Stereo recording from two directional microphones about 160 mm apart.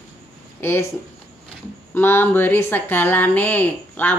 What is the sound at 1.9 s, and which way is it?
Speech, 15° left (ahead or behind).